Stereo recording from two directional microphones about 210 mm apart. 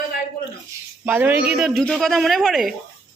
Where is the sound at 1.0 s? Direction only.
10° right (ahead or behind).